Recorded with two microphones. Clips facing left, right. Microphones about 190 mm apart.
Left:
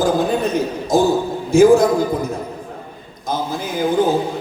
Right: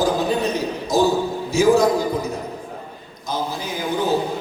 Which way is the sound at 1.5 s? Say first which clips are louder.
Left 6 dB; 50° left (ahead or behind).